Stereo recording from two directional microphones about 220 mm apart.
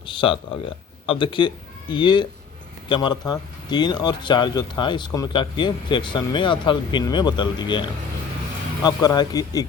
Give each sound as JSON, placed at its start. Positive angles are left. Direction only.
{"t": 0.0, "sound": "speech", "side_deg": 25}